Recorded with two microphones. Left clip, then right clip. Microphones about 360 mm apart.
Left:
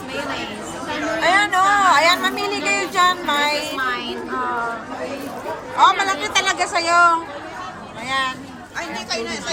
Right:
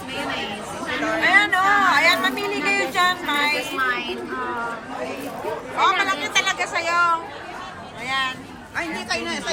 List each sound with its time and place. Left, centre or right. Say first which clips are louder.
1.2 s a sound: left 1 dB; centre
5.8 s a woman's voice: left 4 dB; centre
8.7 s speech: even; right